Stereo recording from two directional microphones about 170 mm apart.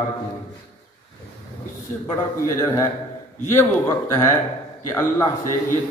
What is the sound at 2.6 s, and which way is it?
Speech, 20° left (ahead or behind).